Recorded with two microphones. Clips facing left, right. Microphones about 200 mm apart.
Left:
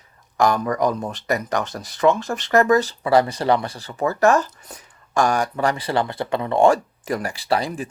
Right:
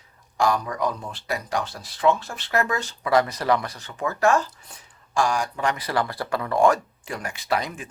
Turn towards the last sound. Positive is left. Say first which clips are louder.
# left 4 dB
turn(degrees=35)  # may be behind; listen again after turning